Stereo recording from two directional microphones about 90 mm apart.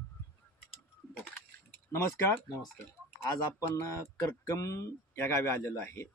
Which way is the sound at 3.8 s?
35° left (ahead or behind).